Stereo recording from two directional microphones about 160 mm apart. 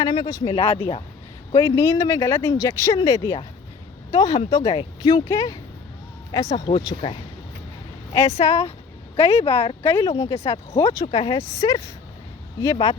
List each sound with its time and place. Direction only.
0.0 s speech: 25° left (ahead or behind)
1.5 s speech: 20° left (ahead or behind)
6.7 s speech: 30° left (ahead or behind)
8.1 s speech: 20° left (ahead or behind)
8.4 s speech: 40° left (ahead or behind)
9.8 s speech: 15° left (ahead or behind)
10.3 s speech: 40° left (ahead or behind)
10.8 s speech: 20° left (ahead or behind)
11.0 s speech: 40° left (ahead or behind)
11.3 s speech: 20° left (ahead or behind)
12.7 s speech: 35° left (ahead or behind)